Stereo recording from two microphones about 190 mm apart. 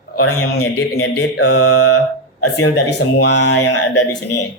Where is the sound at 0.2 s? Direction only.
90° left; by 2.0 s 60° left (ahead or behind).